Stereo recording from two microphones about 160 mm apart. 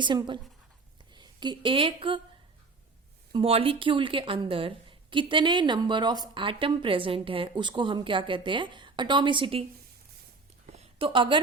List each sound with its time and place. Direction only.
0.0 s speech: 30° right (ahead or behind)
3.3 s a woman's voice: 35° right (ahead or behind)
10.7 s a sound: 40° right (ahead or behind)